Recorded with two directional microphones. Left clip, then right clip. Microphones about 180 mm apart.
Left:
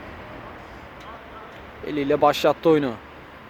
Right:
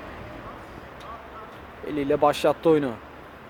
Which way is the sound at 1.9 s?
5° left (ahead or behind).